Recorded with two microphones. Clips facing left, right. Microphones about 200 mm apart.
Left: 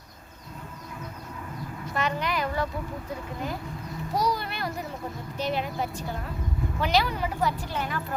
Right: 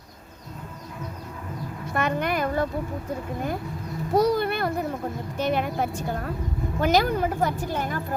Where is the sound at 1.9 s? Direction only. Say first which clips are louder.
Right 4 dB; 55° right (ahead or behind).